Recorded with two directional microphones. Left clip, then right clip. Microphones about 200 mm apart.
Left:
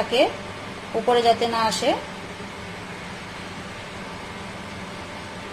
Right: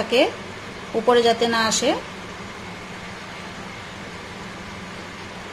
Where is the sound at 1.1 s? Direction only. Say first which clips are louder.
Right 2 dB; 15° right (ahead or behind).